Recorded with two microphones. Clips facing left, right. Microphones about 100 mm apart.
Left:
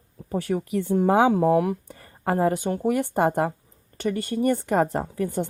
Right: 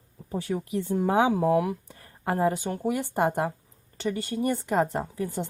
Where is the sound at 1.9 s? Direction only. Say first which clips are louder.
Left 4 dB; 60° left (ahead or behind).